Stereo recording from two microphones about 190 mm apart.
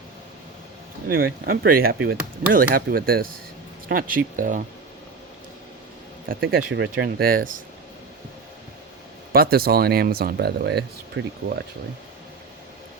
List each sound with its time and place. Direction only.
1.0 s speech: 50° right (ahead or behind)
6.2 s speech: 50° right (ahead or behind)
9.3 s speech: 50° right (ahead or behind)
11.2 s speech: 75° right (ahead or behind)